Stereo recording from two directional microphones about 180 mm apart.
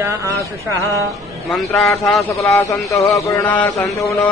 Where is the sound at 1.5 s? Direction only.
Centre (ahead or behind).